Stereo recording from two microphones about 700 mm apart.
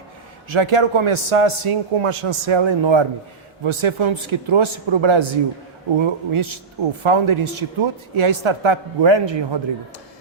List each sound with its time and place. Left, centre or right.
0.5 s a man's voice: right